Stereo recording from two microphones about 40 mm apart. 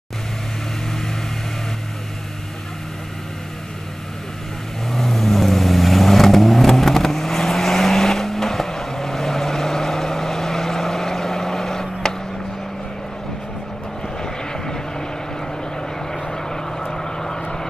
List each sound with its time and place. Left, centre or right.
4.9 s vehicle: centre
14.2 s vehicle: centre
16.1 s vehicle: centre